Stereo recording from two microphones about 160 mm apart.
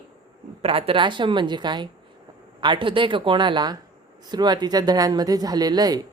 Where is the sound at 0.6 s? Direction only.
35° right (ahead or behind).